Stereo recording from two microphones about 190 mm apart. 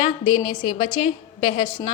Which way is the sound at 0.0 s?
25° left (ahead or behind).